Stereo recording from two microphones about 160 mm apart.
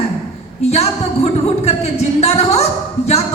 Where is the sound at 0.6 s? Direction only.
40° left (ahead or behind).